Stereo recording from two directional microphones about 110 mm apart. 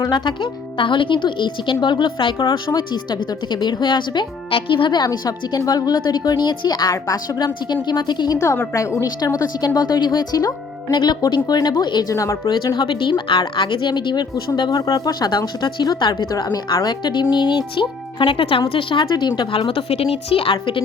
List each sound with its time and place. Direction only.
0.0 s speech: 45° left (ahead or behind)
8.4 s speech: 25° left (ahead or behind)
12.1 s speech: 30° left (ahead or behind)
12.5 s speech: 40° left (ahead or behind)